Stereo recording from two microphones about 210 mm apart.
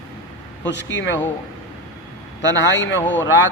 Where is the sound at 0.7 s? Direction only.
60° left (ahead or behind).